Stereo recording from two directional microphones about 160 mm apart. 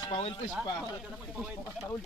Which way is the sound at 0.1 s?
35° left (ahead or behind).